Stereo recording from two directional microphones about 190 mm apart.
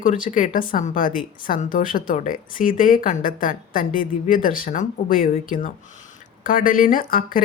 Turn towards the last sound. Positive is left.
turn(degrees=50)  # may be behind; listen again after turning